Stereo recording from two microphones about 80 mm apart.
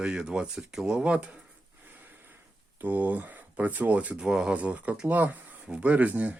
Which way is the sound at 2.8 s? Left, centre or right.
Right.